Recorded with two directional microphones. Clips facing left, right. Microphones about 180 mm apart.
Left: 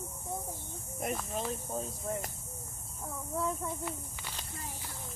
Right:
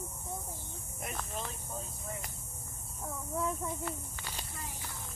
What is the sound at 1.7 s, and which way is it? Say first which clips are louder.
Speech: left 6 dB; 40° left (ahead or behind).